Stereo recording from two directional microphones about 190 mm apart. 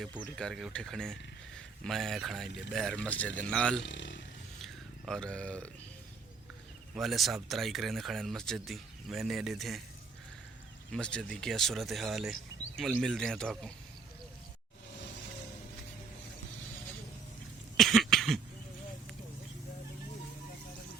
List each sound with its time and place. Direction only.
0.3 s speech: centre (ahead or behind)
3.8 s speech: 75° left (ahead or behind)
4.6 s a sound: 5° left (ahead or behind)
6.9 s speech: centre (ahead or behind)
10.9 s speech: 5° left (ahead or behind)
17.7 s cough: centre (ahead or behind)